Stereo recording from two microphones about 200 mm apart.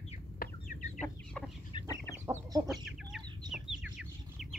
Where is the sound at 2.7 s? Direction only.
Centre (ahead or behind).